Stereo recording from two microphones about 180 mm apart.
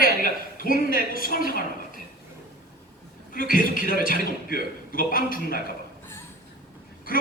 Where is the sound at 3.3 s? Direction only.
50° left (ahead or behind).